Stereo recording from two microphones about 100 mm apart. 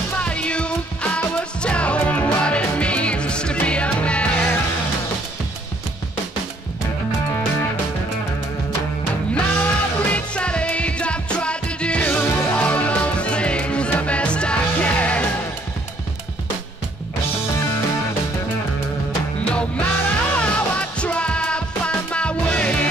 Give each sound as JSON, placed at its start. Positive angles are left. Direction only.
{"t": 0.1, "sound": "music", "side_deg": 10}
{"t": 9.3, "sound": "music", "side_deg": 15}
{"t": 19.5, "sound": "music", "side_deg": 10}